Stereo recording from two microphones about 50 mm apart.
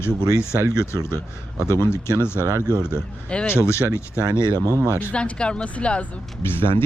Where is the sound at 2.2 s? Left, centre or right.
Left.